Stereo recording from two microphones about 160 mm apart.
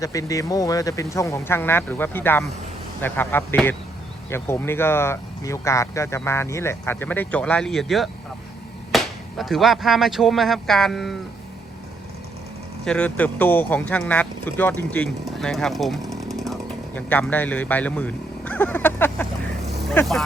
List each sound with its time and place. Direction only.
0.0 s speech: 20° left (ahead or behind); by 11.2 s centre (ahead or behind)
12.8 s speech: 5° left (ahead or behind)
15.4 s chainsaw: centre (ahead or behind)
17.1 s speech: 10° left (ahead or behind)